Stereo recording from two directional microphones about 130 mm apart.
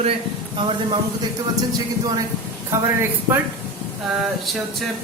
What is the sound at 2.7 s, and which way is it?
Speech, 15° right (ahead or behind).